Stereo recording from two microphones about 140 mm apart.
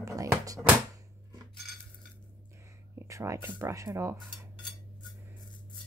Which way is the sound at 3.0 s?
20° right (ahead or behind).